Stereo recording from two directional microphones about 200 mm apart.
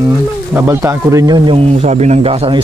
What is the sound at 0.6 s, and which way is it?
Speech, 15° right (ahead or behind).